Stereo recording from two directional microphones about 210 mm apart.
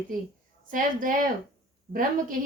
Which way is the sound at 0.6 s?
40° right (ahead or behind).